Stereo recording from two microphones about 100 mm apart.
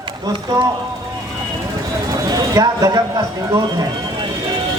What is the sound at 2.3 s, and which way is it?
A woman's voice, 40° right (ahead or behind).